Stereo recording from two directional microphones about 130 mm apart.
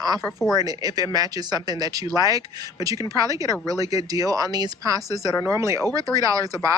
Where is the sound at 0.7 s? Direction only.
30° right (ahead or behind).